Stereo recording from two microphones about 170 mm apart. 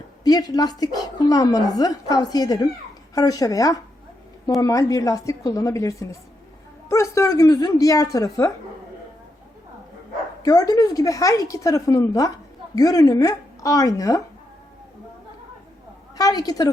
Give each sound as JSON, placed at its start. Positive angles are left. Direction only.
{"t": 0.3, "sound": "a woman's voice", "side_deg": 20}
{"t": 10.4, "sound": "a woman's voice", "side_deg": 20}
{"t": 16.1, "sound": "a woman's voice", "side_deg": 20}